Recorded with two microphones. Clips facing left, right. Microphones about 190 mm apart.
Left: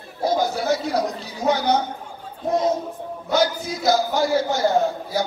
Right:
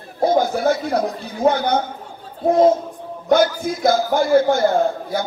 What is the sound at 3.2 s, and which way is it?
A man's voice, 55° right (ahead or behind).